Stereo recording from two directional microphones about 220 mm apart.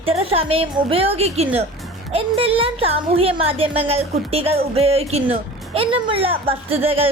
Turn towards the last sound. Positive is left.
turn(degrees=-25)  # may be behind; listen again after turning